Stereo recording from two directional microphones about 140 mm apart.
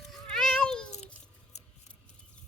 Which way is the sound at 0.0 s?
5° left (ahead or behind).